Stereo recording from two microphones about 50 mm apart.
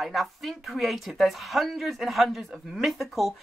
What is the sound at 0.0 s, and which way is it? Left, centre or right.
Speech, centre.